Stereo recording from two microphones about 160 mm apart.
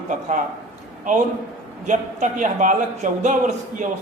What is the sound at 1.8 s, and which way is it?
Speech, 55° right (ahead or behind).